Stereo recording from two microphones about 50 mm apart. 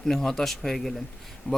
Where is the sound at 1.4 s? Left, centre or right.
Left.